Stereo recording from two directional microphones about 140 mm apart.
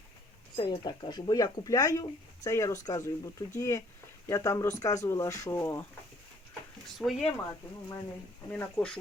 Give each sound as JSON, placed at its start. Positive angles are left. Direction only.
{"t": 0.5, "sound": "speech", "side_deg": 35}
{"t": 6.5, "sound": "a sound", "side_deg": 0}
{"t": 8.4, "sound": "speech", "side_deg": 10}